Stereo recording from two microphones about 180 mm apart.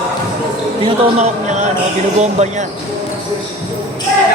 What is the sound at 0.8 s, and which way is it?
Speech, 40° right (ahead or behind).